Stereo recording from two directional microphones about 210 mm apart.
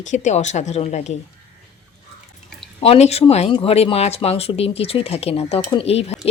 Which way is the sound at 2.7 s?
30° left (ahead or behind).